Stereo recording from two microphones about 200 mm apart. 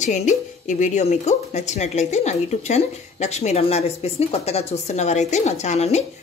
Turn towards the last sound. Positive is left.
turn(degrees=35)  # may be behind; listen again after turning